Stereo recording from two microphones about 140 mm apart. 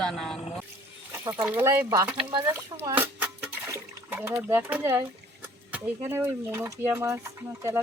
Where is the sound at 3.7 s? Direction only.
15° right (ahead or behind).